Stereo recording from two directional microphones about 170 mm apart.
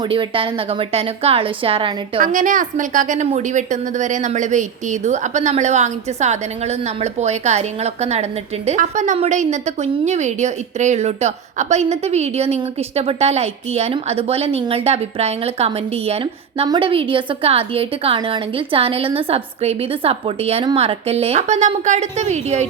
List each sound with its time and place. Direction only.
0.1 s a woman's voice: 30° right (ahead or behind)
2.2 s a woman's voice: 50° right (ahead or behind)